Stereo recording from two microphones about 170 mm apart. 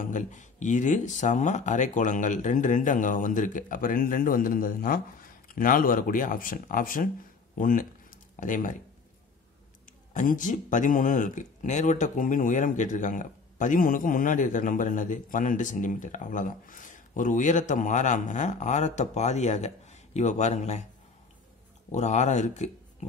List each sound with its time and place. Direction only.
0.0 s speech: 45° left (ahead or behind)
10.1 s speech: 50° left (ahead or behind)
21.9 s speech: 45° left (ahead or behind)